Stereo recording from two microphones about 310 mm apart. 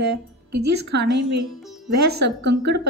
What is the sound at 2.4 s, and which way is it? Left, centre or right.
Speech, right.